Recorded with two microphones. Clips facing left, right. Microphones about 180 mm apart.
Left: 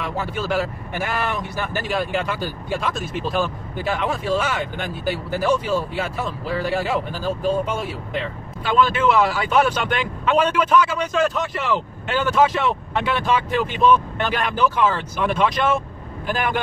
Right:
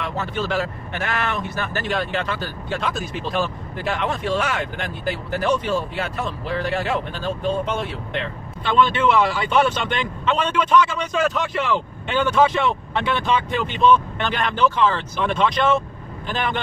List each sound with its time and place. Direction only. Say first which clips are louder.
0.0 s speech: even; 10° left (ahead or behind)